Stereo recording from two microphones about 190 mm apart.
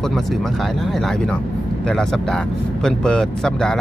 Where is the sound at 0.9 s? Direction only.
Centre (ahead or behind).